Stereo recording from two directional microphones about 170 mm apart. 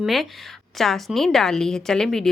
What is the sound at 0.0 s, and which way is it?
A woman's voice, centre (ahead or behind).